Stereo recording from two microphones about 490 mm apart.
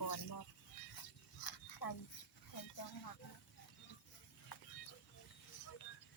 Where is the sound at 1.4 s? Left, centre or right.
Left.